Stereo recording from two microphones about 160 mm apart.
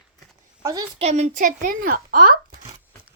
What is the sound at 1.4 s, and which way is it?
Speech, 60° right (ahead or behind).